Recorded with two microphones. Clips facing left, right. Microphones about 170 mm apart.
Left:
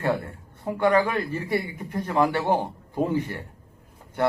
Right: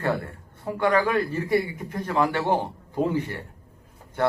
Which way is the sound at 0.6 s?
15° left (ahead or behind).